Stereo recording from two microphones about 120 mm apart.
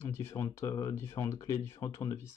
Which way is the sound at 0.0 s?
25° left (ahead or behind).